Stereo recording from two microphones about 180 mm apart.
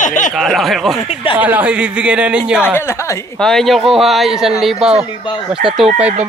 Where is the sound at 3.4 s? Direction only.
Centre (ahead or behind).